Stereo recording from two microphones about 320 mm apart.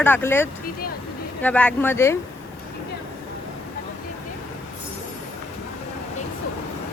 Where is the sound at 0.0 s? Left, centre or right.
Centre.